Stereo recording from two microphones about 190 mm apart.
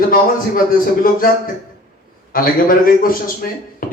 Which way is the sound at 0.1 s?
50° left (ahead or behind).